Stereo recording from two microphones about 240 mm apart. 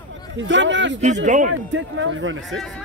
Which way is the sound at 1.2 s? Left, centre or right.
Right.